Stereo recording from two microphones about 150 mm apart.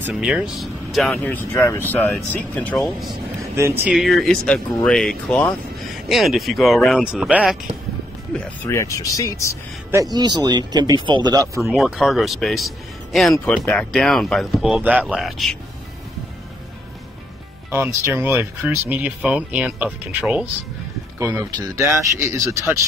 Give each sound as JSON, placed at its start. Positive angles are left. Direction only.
{"t": 0.1, "sound": "speech", "side_deg": -5}
{"t": 3.8, "sound": "speech", "side_deg": 0}
{"t": 8.3, "sound": "speech", "side_deg": 5}
{"t": 8.7, "sound": "speech", "side_deg": 20}
{"t": 10.1, "sound": "speech", "side_deg": -25}
{"t": 11.7, "sound": "speech", "side_deg": 0}
{"t": 17.6, "sound": "speech", "side_deg": -15}